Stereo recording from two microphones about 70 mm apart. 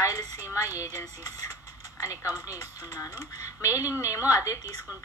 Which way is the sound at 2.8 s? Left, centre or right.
Left.